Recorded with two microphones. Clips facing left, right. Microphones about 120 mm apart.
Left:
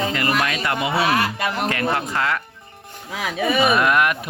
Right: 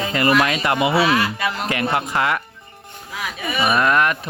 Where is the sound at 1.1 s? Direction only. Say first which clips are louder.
Right 1 dB; 55° left (ahead or behind).